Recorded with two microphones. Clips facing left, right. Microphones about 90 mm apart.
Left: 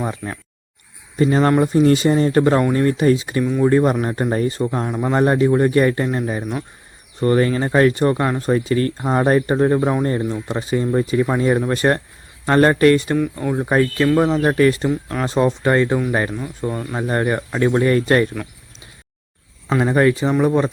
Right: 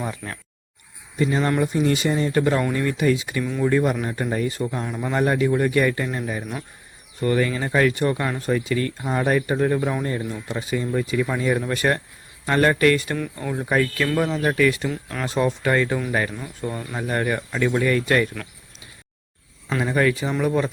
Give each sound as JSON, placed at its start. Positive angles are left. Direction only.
{"t": 0.0, "sound": "speech", "side_deg": 25}
{"t": 1.2, "sound": "speech", "side_deg": 45}
{"t": 4.0, "sound": "speech", "side_deg": 45}
{"t": 14.8, "sound": "speech", "side_deg": 20}
{"t": 16.6, "sound": "speech", "side_deg": 20}
{"t": 19.8, "sound": "speech", "side_deg": 35}